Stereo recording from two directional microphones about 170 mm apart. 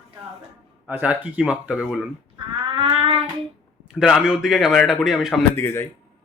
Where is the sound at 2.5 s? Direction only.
30° right (ahead or behind).